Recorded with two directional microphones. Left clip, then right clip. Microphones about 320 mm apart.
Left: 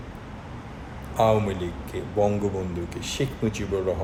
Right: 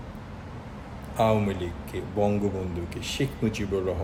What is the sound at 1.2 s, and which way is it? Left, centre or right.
Speech, centre.